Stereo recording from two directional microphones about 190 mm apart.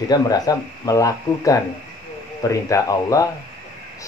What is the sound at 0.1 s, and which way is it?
Speech, 20° left (ahead or behind).